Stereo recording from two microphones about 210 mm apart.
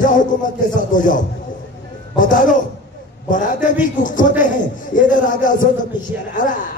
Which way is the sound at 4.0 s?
40° left (ahead or behind).